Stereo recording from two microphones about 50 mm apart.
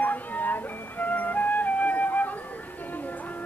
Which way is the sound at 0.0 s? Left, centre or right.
Left.